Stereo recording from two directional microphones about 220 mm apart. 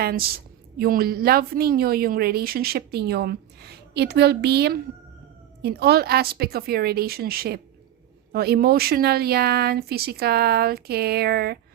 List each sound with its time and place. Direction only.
0.0 s a woman's voice: 45° right (ahead or behind)